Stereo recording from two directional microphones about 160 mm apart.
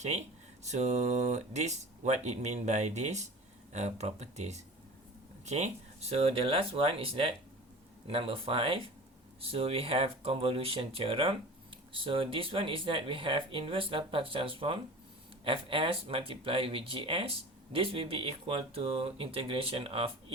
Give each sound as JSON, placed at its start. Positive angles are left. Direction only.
{"t": 0.0, "sound": "speech", "side_deg": -45}